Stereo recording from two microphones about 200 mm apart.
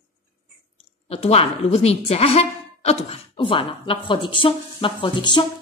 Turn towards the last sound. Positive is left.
turn(degrees=25)  # may be behind; listen again after turning